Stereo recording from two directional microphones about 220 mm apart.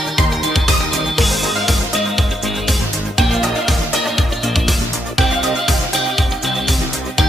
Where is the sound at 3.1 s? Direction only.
Centre (ahead or behind).